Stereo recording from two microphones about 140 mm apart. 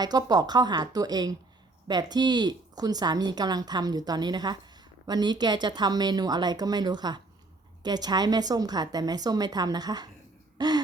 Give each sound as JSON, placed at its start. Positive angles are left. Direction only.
{"t": 0.0, "sound": "speech", "side_deg": -30}